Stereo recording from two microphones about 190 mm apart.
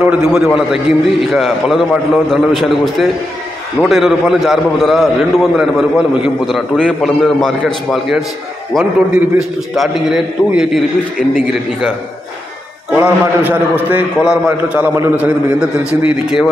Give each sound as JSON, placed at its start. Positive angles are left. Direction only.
{"t": 0.0, "sound": "a man's voice", "side_deg": -5}
{"t": 12.9, "sound": "a man's voice", "side_deg": -10}